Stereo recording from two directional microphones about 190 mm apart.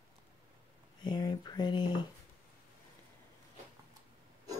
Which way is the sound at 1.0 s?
20° left (ahead or behind).